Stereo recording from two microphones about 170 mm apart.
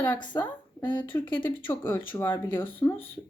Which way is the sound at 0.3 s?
20° left (ahead or behind).